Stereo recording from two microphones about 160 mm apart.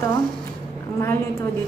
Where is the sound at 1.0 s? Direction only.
15° left (ahead or behind).